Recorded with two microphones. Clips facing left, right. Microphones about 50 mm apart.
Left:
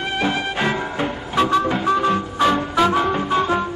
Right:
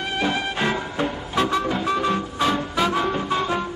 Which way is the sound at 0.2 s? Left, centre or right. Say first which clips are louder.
Left 2 dB; centre.